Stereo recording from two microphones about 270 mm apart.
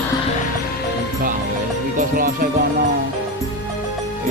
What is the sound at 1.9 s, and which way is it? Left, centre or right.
Music, right.